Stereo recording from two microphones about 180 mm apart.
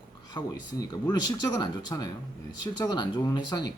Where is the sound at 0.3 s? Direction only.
20° left (ahead or behind).